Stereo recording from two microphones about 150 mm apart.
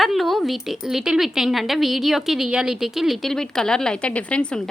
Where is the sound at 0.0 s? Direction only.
Centre (ahead or behind).